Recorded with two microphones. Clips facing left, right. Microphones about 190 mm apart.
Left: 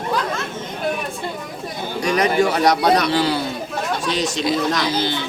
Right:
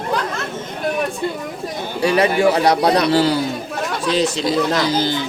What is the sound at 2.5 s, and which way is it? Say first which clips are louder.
Speech: right 1 dB; 35° right (ahead or behind).